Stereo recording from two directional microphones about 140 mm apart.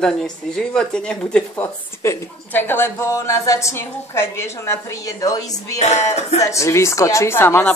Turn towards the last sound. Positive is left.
turn(degrees=15)  # may be behind; listen again after turning